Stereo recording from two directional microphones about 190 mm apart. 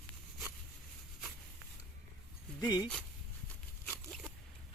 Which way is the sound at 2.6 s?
20° left (ahead or behind).